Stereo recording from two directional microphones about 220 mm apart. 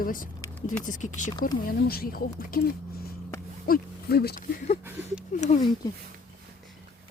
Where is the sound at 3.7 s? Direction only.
45° left (ahead or behind).